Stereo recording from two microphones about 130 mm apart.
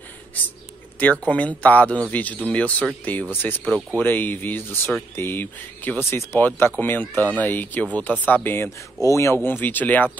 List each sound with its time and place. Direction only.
1.2 s speech: 10° left (ahead or behind)